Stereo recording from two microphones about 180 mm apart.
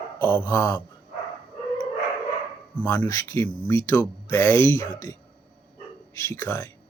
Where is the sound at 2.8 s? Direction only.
10° left (ahead or behind).